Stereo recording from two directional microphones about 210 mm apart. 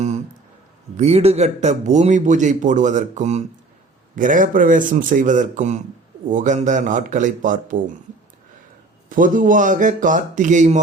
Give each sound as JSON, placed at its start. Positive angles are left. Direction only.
{"t": 0.9, "sound": "a man's voice", "side_deg": -30}
{"t": 9.0, "sound": "a man's voice", "side_deg": -40}